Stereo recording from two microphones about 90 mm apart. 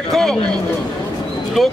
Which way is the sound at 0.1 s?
5° left (ahead or behind).